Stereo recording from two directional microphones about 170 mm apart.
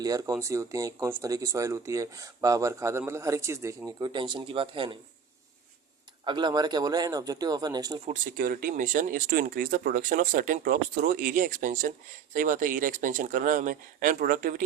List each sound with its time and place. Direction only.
0.0 s speech: 20° right (ahead or behind)
6.2 s speech: 25° right (ahead or behind)
8.0 s speech: 50° right (ahead or behind)